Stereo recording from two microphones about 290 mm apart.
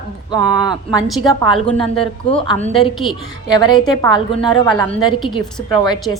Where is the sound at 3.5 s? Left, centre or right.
Centre.